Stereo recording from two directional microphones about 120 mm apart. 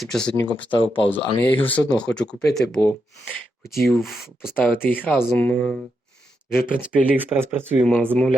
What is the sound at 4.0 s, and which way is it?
Speech, centre (ahead or behind).